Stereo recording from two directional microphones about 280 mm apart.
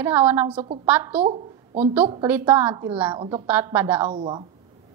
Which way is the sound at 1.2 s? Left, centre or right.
Right.